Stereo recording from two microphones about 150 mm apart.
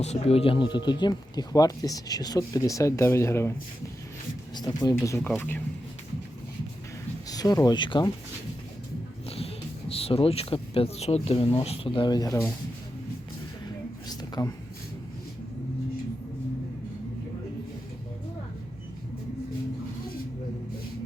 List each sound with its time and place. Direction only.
0.0 s speech: 45° left (ahead or behind); by 3.5 s 15° left (ahead or behind)
4.5 s speech: 30° left (ahead or behind)
7.3 s speech: 25° left (ahead or behind)
9.9 s speech: 40° left (ahead or behind)
14.1 s a sound: 25° left (ahead or behind)